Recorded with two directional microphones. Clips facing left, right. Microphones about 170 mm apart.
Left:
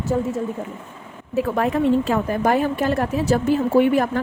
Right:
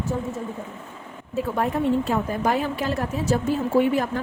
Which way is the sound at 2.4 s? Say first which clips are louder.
Left 4 dB; 50° left (ahead or behind).